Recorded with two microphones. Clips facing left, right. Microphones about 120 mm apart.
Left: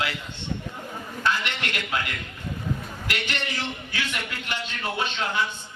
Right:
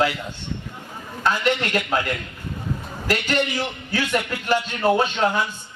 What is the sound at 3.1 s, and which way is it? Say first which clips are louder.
A man's voice: right 9 dB; 40° right (ahead or behind).